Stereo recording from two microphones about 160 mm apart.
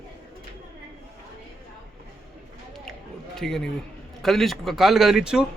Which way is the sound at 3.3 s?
Centre (ahead or behind).